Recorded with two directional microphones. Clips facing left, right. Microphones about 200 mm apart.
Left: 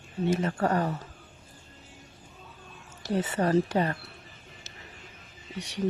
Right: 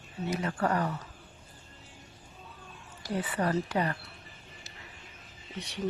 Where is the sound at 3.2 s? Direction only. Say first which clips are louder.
Left 3 dB; 45° left (ahead or behind).